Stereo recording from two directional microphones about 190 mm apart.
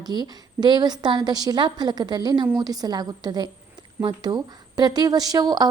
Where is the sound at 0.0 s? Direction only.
20° right (ahead or behind).